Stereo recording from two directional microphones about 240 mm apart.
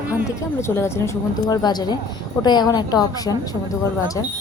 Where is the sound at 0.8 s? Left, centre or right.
Centre.